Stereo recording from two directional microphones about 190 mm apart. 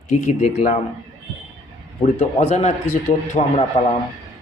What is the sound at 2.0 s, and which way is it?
Speech, 30° left (ahead or behind).